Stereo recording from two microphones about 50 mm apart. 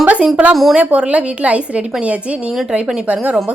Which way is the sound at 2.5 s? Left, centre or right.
Centre.